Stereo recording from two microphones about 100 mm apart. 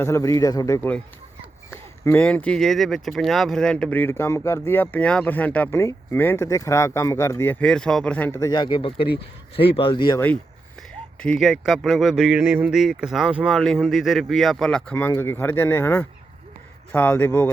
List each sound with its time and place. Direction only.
0.0 s speech: 30° left (ahead or behind)
0.8 s speech: 15° left (ahead or behind)
2.1 s speech: 15° left (ahead or behind)
2.6 s speech: centre (ahead or behind)
3.8 s speech: 20° left (ahead or behind)
5.7 s speech: 25° left (ahead or behind)
7.6 s speech: 5° left (ahead or behind)
8.3 s speech: 30° left (ahead or behind)
8.5 s speech: 50° left (ahead or behind)
9.6 s speech: 65° left (ahead or behind)
9.9 s speech: 45° left (ahead or behind)
11.3 s speech: 5° right (ahead or behind)
15.1 s speech: 20° left (ahead or behind)